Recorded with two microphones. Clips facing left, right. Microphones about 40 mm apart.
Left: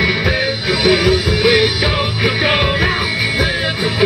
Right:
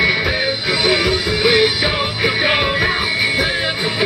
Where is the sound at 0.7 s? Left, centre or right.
Centre.